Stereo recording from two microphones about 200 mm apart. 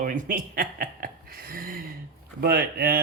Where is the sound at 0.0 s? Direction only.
40° right (ahead or behind).